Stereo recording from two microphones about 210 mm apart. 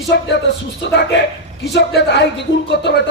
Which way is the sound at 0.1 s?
55° left (ahead or behind).